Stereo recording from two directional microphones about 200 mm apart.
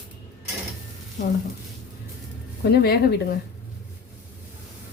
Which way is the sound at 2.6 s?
50° left (ahead or behind).